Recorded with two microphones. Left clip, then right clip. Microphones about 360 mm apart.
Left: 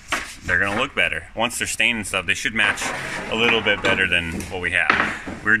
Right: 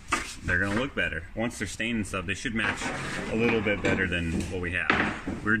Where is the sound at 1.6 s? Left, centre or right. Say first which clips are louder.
Left 11 dB; centre.